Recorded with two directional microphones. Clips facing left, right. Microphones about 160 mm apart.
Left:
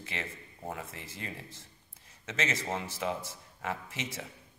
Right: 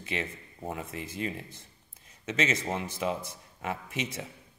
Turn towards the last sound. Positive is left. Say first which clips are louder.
# right 3 dB
turn(degrees=-15)  # may be behind; listen again after turning